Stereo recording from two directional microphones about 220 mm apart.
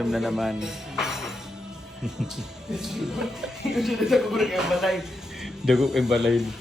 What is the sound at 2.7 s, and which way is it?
Speech, centre (ahead or behind).